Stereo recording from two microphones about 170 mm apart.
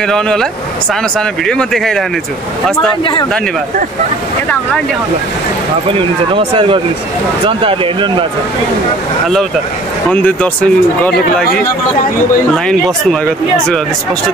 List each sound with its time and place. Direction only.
0.0 s speech: 5° left (ahead or behind)
5.9 s speech: 30° right (ahead or behind)
10.1 s speech: 10° left (ahead or behind)
12.6 s speech: 5° left (ahead or behind)